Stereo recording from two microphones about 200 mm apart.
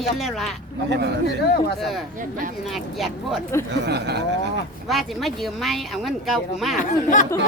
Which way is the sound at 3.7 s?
55° right (ahead or behind).